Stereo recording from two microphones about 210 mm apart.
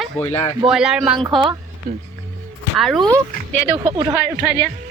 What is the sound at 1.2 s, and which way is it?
Speech, 25° right (ahead or behind).